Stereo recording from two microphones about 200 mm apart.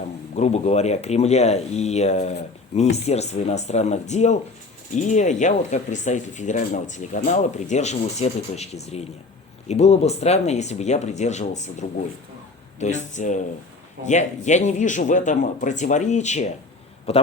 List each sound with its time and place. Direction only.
0.3 s a man's voice: 35° left (ahead or behind)